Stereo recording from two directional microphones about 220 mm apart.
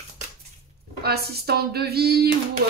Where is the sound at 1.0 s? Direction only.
45° right (ahead or behind).